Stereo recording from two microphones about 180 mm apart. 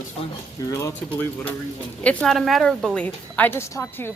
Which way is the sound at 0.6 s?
20° left (ahead or behind).